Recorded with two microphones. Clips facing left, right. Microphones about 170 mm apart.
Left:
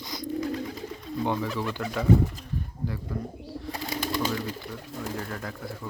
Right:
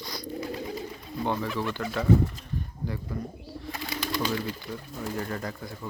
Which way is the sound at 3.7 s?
40° left (ahead or behind).